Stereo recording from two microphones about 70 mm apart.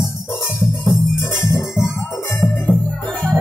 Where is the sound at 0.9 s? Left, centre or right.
Left.